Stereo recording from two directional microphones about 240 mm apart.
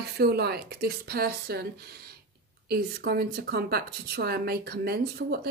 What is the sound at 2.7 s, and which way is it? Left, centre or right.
A woman's voice, right.